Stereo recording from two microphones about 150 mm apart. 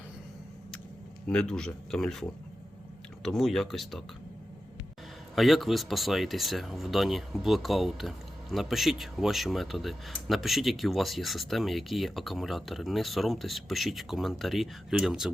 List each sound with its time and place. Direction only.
1.3 s speech: 5° left (ahead or behind)
3.2 s speech: centre (ahead or behind)
5.3 s speech: centre (ahead or behind)